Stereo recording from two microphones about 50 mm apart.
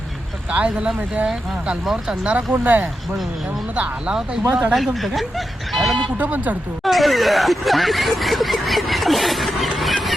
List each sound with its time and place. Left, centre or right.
0.5 s speech: right
2.5 s speech: right
3.8 s speech: centre
4.9 s speech: centre
6.1 s speech: right
6.8 s speech: centre